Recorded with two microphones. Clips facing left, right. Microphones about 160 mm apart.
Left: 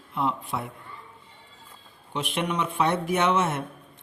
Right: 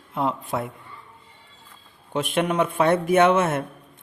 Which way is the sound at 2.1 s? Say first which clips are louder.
Right 5 dB; 45° right (ahead or behind).